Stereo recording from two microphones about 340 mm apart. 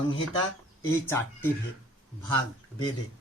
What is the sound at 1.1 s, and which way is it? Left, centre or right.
Speech, centre.